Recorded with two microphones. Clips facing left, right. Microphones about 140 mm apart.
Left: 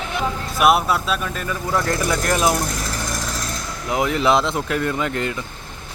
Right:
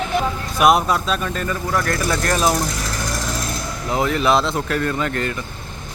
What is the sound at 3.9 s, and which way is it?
Speech, 15° left (ahead or behind).